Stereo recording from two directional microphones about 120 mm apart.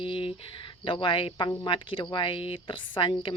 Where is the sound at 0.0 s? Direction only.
50° left (ahead or behind).